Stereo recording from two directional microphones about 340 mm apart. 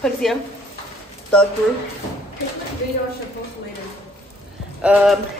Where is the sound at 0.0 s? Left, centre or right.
Centre.